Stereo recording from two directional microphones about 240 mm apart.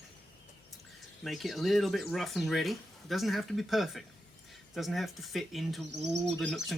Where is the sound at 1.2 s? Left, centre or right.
Centre.